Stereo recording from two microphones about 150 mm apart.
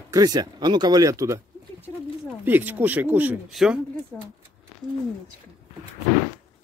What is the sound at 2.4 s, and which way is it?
Speech, 10° right (ahead or behind).